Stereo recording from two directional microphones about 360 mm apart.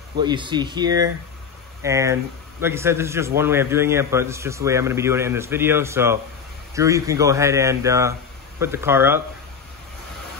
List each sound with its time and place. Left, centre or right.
0.2 s a man's voice: centre